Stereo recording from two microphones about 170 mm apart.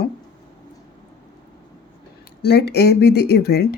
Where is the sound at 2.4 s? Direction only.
70° left (ahead or behind).